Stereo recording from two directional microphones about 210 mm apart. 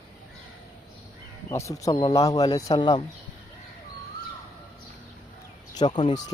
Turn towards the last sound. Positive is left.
turn(degrees=25)  # may be behind; listen again after turning